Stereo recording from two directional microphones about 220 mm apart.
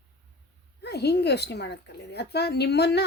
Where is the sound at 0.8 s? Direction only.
50° left (ahead or behind).